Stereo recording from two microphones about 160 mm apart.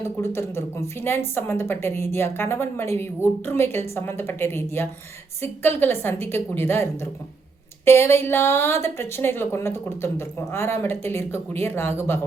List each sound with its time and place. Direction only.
0.0 s a woman's voice: 15° left (ahead or behind)